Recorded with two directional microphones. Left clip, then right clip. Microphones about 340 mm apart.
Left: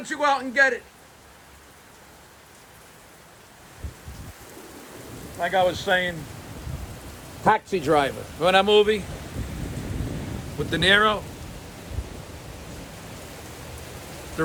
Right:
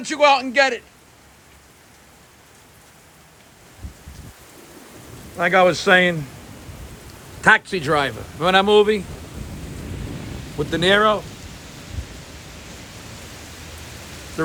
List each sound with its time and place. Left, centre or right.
0.2 s speech: centre
5.4 s speech: right
7.5 s speech: right
10.6 s speech: centre
14.4 s speech: centre